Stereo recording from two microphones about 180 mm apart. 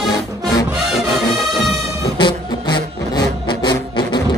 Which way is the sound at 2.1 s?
25° left (ahead or behind).